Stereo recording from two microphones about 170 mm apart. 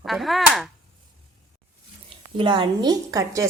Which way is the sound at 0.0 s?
Centre (ahead or behind).